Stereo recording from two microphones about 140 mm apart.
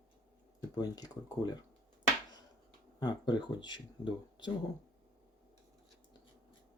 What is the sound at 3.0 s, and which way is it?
Speech, 30° left (ahead or behind).